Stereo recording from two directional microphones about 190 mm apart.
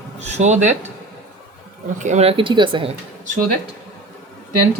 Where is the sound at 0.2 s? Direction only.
35° right (ahead or behind).